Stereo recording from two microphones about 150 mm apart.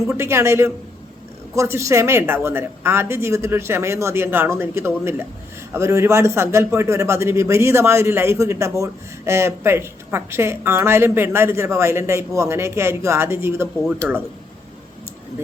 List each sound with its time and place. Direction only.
0.1 s a man's voice: 20° right (ahead or behind)